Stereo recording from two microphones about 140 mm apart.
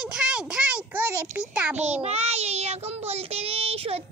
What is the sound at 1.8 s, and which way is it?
Child singing, 50° right (ahead or behind).